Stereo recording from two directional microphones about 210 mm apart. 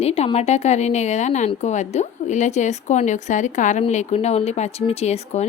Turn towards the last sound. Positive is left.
turn(degrees=30)  # may be behind; listen again after turning